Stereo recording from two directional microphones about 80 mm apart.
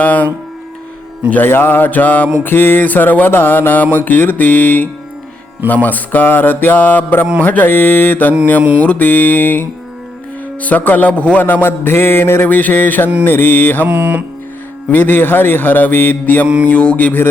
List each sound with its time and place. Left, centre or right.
0.0 s music: left
1.3 s music: left
13.8 s music: centre
14.8 s music: left